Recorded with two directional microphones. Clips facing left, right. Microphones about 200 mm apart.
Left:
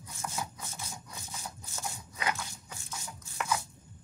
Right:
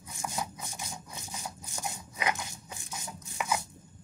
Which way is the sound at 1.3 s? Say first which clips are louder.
Right 3 dB; 15° right (ahead or behind).